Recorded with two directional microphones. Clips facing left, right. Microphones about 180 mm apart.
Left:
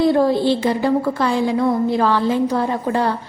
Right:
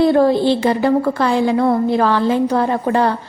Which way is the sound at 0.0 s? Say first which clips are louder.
Right 2 dB; 60° right (ahead or behind).